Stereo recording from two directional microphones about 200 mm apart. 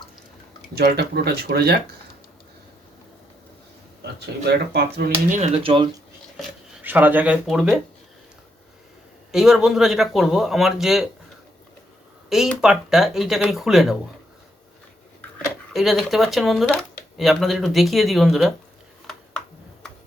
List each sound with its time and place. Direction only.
0.8 s speech: 55° right (ahead or behind)
4.0 s speech: 55° right (ahead or behind)
5.3 s speech: 30° right (ahead or behind)
6.8 s speech: 10° right (ahead or behind)
9.3 s speech: centre (ahead or behind)
12.3 s speech: centre (ahead or behind)
15.7 s speech: centre (ahead or behind)